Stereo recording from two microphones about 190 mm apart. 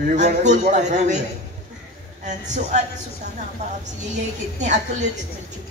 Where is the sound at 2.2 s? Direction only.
40° right (ahead or behind).